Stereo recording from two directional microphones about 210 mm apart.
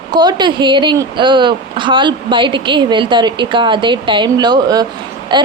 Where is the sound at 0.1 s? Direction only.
20° right (ahead or behind).